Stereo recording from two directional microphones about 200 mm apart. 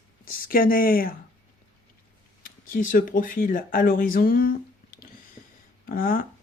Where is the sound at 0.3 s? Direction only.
45° left (ahead or behind).